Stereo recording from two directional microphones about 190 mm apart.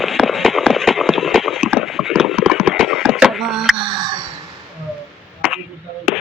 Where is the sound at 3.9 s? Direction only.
20° right (ahead or behind).